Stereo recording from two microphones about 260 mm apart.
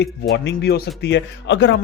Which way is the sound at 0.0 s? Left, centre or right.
Left.